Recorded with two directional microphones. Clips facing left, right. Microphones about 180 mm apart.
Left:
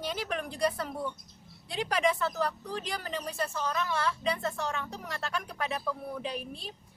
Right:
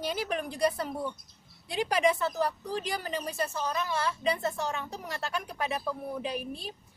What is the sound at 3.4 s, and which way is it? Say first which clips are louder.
Speech: even; 15° right (ahead or behind).